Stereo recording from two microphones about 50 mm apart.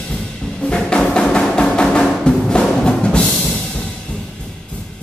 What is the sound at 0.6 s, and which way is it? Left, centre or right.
Music, centre.